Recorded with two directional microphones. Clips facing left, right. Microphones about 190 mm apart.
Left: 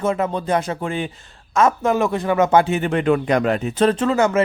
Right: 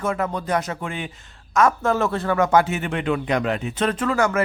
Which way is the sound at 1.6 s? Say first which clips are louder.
Left 2 dB; 20° left (ahead or behind).